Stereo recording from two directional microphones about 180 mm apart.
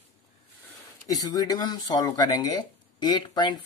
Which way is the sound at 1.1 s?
20° left (ahead or behind).